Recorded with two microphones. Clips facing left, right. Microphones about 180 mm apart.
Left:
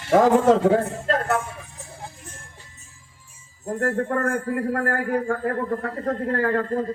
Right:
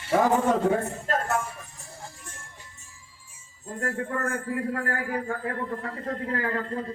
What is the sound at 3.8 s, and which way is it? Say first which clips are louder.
A man's voice: left 6 dB; 55° left (ahead or behind).